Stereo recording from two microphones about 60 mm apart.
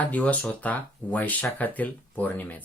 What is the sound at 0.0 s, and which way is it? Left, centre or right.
Speech, left.